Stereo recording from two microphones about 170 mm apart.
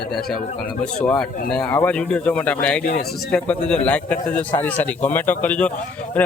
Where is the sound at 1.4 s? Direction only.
5° left (ahead or behind).